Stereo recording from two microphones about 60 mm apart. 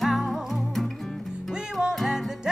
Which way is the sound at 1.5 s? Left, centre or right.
Centre.